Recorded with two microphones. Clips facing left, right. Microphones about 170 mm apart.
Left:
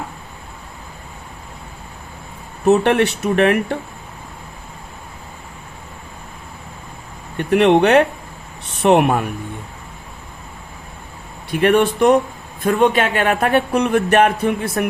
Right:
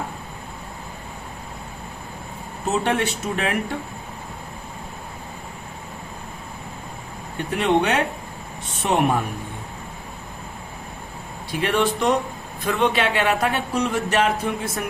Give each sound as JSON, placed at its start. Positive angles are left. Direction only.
{"t": 2.6, "sound": "speech", "side_deg": 65}
{"t": 7.3, "sound": "speech", "side_deg": 65}
{"t": 11.6, "sound": "speech", "side_deg": 55}